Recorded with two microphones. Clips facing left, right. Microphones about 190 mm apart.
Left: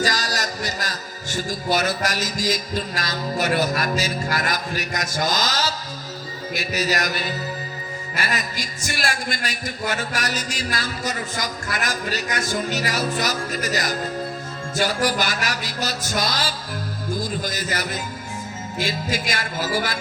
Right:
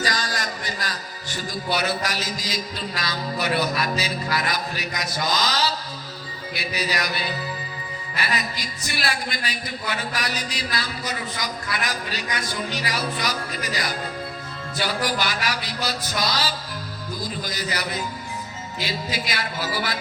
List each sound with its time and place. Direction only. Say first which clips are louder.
0.0 s a man's voice: left 3 dB; 40° left (ahead or behind)